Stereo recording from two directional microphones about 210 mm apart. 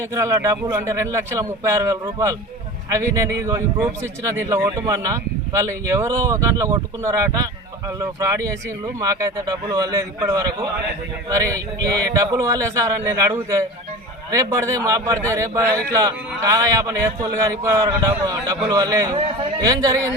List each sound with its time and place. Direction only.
0.0 s a man's voice: 15° right (ahead or behind)